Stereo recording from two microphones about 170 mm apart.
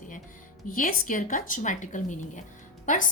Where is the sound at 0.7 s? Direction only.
55° left (ahead or behind).